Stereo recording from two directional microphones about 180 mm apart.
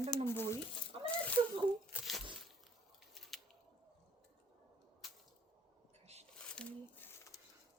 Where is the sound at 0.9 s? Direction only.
30° right (ahead or behind).